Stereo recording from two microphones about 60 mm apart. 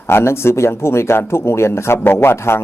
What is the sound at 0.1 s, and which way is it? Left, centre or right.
Speech, left.